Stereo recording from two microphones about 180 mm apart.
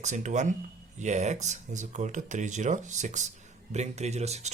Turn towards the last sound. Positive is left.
turn(degrees=-35)  # may be behind; listen again after turning